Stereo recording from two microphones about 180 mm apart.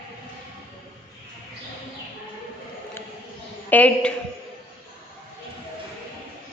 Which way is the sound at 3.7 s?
10° left (ahead or behind).